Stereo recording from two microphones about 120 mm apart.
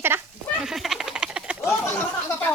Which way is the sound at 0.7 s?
Centre (ahead or behind).